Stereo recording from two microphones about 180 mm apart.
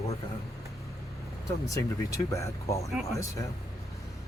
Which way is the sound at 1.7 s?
15° left (ahead or behind).